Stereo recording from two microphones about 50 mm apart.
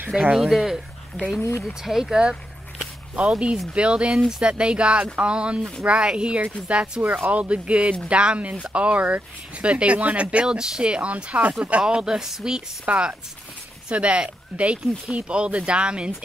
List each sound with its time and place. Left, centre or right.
0.1 s speech: centre
0.4 s speech: centre; by 7.0 s right
7.0 s speech: right
11.8 s speech: centre
12.8 s speech: right